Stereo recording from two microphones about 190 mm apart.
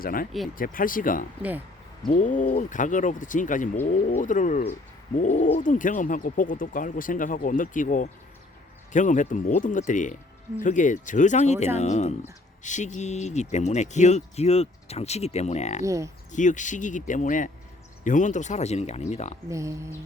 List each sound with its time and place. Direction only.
0.0 s speech: 50° left (ahead or behind)
1.4 s speech: 10° right (ahead or behind)
2.0 s speech: 45° left (ahead or behind)
15.8 s speech: 15° right (ahead or behind)
16.3 s speech: 40° left (ahead or behind)
19.5 s speech: 15° right (ahead or behind)